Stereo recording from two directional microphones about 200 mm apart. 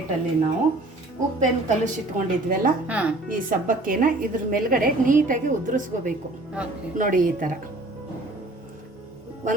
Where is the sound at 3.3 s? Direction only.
40° right (ahead or behind).